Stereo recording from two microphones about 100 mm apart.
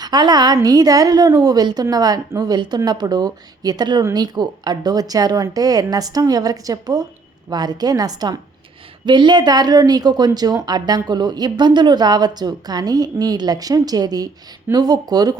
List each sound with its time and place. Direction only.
0.0 s a woman's voice: 45° right (ahead or behind)